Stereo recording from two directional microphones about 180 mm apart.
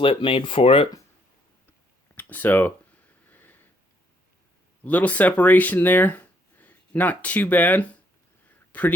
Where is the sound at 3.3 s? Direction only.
10° left (ahead or behind).